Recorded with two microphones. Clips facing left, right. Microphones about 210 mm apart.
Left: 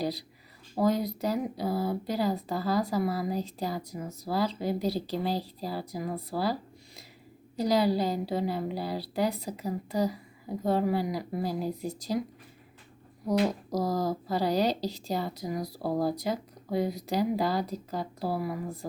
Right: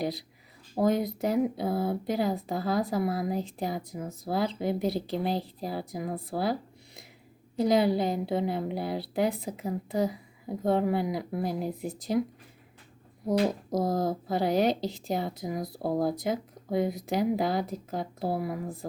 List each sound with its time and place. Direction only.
0.8 s a woman's voice: 20° right (ahead or behind)
10.6 s a woman's voice: 20° right (ahead or behind)
13.2 s a woman's voice: 25° right (ahead or behind)